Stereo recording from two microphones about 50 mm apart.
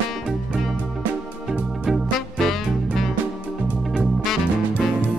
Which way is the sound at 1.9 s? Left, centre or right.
Centre.